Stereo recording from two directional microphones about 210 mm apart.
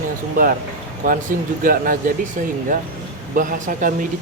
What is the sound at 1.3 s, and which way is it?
A man's voice, 45° right (ahead or behind).